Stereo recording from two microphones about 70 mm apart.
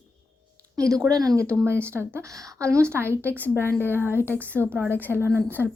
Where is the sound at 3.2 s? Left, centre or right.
Left.